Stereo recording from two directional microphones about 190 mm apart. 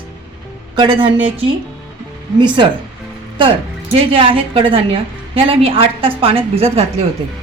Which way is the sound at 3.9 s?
30° right (ahead or behind).